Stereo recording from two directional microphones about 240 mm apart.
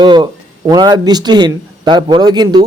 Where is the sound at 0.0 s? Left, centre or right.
Centre.